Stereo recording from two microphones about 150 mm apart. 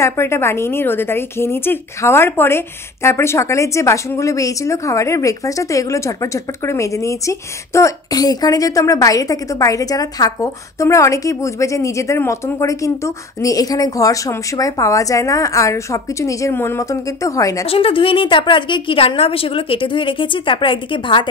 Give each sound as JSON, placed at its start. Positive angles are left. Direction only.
{"t": 0.0, "sound": "a woman's voice", "side_deg": 15}
{"t": 17.6, "sound": "a woman's voice", "side_deg": 40}